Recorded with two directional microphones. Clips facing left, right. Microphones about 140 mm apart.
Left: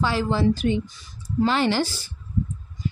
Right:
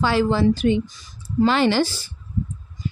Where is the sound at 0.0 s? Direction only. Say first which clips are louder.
Right 4 dB; 85° right.